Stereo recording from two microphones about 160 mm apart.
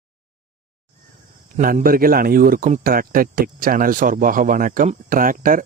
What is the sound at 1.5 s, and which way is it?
Speech, 60° right (ahead or behind).